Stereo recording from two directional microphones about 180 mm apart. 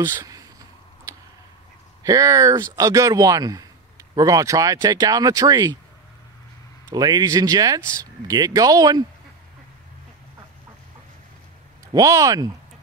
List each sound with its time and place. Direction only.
0.0 s a sound: 15° right (ahead or behind)
2.0 s speech: 20° right (ahead or behind)
6.9 s speech: 20° right (ahead or behind)
11.9 s speech: 20° right (ahead or behind)